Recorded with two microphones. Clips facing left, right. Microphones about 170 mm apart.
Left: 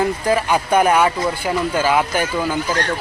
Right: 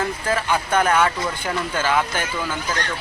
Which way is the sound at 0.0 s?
15° left (ahead or behind).